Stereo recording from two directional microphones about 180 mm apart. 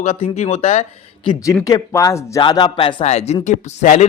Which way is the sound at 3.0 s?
35° left (ahead or behind).